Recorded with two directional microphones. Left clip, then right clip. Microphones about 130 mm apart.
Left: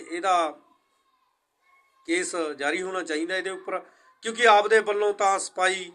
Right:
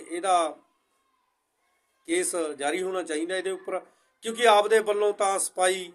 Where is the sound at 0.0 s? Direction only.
15° right (ahead or behind).